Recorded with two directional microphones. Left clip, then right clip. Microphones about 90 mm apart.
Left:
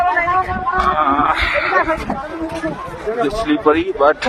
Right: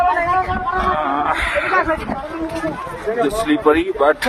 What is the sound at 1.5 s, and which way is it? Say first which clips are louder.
Speech: left 1 dB; 35° right (ahead or behind).